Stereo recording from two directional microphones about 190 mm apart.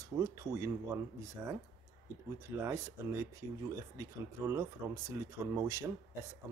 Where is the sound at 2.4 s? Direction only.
15° right (ahead or behind).